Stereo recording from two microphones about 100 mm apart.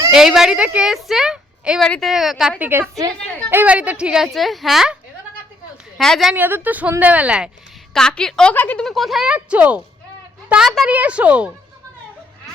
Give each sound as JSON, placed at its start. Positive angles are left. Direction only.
{"t": 0.1, "sound": "a woman's voice", "side_deg": -5}
{"t": 1.8, "sound": "speech", "side_deg": 5}
{"t": 2.6, "sound": "a woman's voice", "side_deg": -20}
{"t": 6.0, "sound": "speech", "side_deg": 0}
{"t": 6.3, "sound": "a woman's voice", "side_deg": -20}
{"t": 7.9, "sound": "a woman's voice", "side_deg": 5}
{"t": 8.9, "sound": "a woman's voice", "side_deg": 0}
{"t": 10.8, "sound": "a woman's voice", "side_deg": -15}